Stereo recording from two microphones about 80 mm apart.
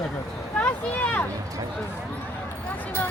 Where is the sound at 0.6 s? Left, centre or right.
Centre.